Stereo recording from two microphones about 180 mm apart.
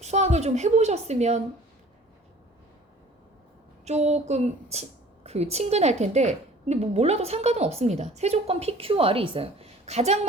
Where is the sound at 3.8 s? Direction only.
40° right (ahead or behind).